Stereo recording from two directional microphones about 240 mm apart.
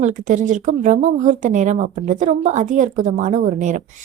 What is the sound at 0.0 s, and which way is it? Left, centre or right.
A woman's voice, right.